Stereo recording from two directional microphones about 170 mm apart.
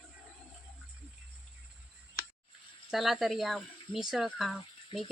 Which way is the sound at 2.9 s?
Centre (ahead or behind).